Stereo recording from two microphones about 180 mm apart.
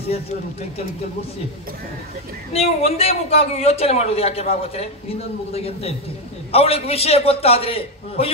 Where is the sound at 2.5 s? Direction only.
35° left (ahead or behind).